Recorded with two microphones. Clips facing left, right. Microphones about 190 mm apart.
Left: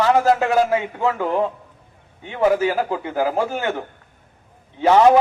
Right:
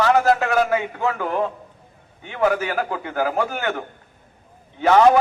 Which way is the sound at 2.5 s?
20° left (ahead or behind).